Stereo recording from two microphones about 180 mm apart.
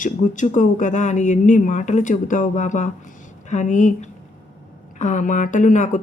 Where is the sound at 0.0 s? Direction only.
45° left (ahead or behind).